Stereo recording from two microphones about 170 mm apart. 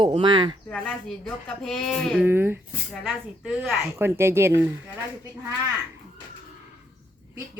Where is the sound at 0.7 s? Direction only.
5° left (ahead or behind).